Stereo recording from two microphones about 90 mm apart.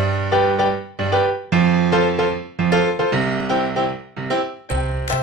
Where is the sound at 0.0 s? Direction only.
Centre (ahead or behind).